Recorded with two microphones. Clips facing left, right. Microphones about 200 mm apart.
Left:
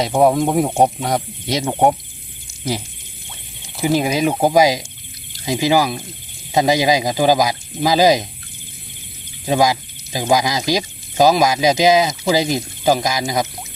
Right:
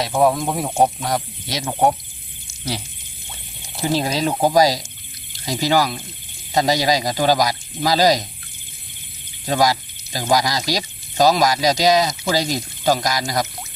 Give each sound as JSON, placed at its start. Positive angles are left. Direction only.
{"t": 0.1, "sound": "speech", "side_deg": 20}
{"t": 3.8, "sound": "speech", "side_deg": 15}
{"t": 9.5, "sound": "speech", "side_deg": 10}